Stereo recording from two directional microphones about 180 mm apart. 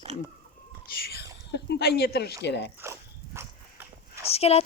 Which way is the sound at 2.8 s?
15° right (ahead or behind).